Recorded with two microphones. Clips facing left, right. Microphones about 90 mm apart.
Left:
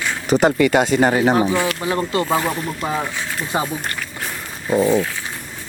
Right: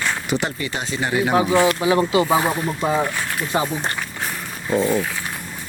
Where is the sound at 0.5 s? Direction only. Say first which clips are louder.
Left 12 dB; 75° left (ahead or behind).